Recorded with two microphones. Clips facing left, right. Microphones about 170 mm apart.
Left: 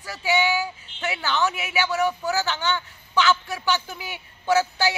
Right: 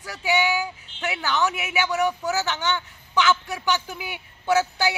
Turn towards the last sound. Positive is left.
turn(degrees=-15)  # may be behind; listen again after turning